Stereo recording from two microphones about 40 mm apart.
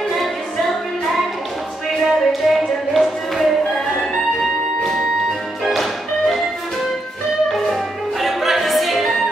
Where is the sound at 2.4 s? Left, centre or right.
Centre.